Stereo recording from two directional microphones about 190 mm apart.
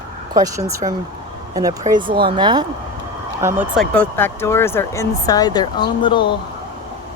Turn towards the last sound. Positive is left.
turn(degrees=25)  # may be behind; listen again after turning